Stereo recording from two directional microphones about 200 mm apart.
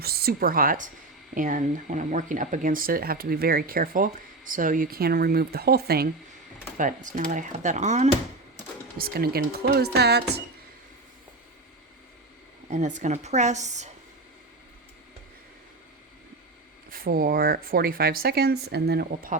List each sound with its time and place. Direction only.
0.0 s speech: 50° right (ahead or behind)
6.7 s speech: 40° right (ahead or behind)
9.0 s speech: 50° right (ahead or behind)
12.7 s speech: 40° right (ahead or behind)
16.9 s speech: 45° right (ahead or behind)